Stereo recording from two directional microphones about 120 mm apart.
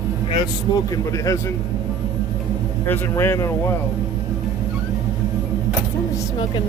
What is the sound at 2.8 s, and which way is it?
Speech, 15° left (ahead or behind).